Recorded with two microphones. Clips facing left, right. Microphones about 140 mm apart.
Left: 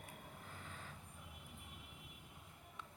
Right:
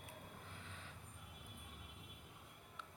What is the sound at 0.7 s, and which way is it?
Vehicle, 45° left (ahead or behind).